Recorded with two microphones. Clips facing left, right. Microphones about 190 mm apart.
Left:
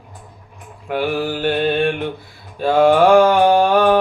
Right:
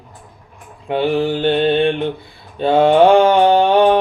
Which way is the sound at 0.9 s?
25° right (ahead or behind).